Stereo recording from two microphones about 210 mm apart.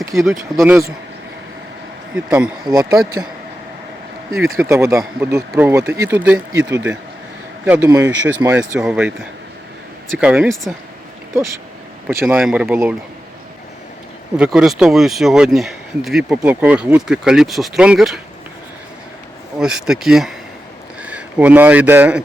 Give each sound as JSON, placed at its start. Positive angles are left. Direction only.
{"t": 0.1, "sound": "speech", "side_deg": 0}
{"t": 0.6, "sound": "speech", "side_deg": -15}
{"t": 2.1, "sound": "speech", "side_deg": -5}
{"t": 2.6, "sound": "speech", "side_deg": -15}
{"t": 4.5, "sound": "a man's voice", "side_deg": -10}
{"t": 12.0, "sound": "speech", "side_deg": -5}
{"t": 14.3, "sound": "speech", "side_deg": -5}
{"t": 19.5, "sound": "speech", "side_deg": -5}